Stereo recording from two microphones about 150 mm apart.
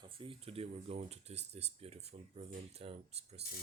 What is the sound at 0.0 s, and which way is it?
Speech, 35° right (ahead or behind).